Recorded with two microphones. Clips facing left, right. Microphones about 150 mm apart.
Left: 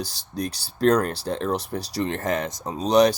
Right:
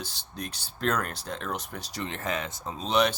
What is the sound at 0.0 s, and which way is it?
Speech, 35° left (ahead or behind).